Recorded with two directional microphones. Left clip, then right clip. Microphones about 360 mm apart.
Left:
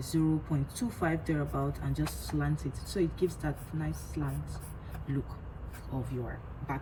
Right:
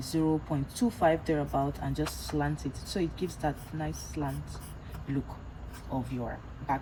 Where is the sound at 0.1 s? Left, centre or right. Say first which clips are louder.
Right 2 dB; centre.